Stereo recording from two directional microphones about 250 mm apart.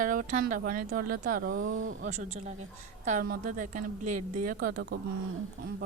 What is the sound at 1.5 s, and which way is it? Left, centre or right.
Speech, right.